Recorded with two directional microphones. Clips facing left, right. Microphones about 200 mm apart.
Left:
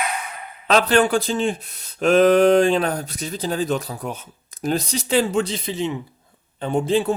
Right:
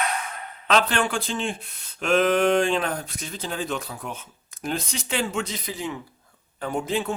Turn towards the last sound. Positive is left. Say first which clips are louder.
# left 6 dB
turn(degrees=30)  # may be behind; listen again after turning